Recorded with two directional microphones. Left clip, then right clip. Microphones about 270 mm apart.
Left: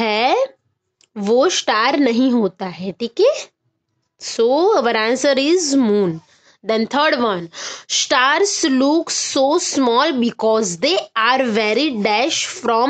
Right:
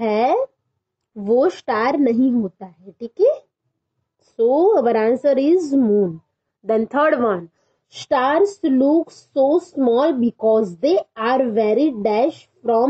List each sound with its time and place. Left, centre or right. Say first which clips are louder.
0.0 s a sound: left 1 dB; centre
1.1 s a woman's voice: left 2 dB; centre
4.8 s a woman's voice: even; centre